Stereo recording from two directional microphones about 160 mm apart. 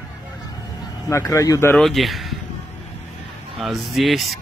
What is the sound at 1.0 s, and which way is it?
Speech, 20° left (ahead or behind).